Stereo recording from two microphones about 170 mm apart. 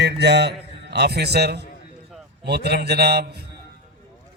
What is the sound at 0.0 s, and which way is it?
A man's voice, 80° right.